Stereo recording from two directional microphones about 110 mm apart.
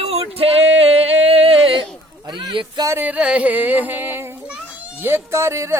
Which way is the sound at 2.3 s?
50° right (ahead or behind).